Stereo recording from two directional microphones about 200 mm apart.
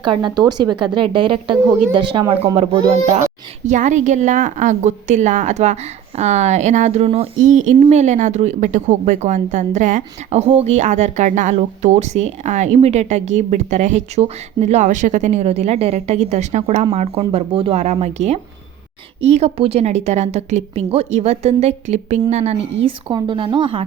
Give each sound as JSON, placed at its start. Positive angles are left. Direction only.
{"t": 0.0, "sound": "a woman's voice", "side_deg": -25}
{"t": 3.7, "sound": "a woman's voice", "side_deg": -35}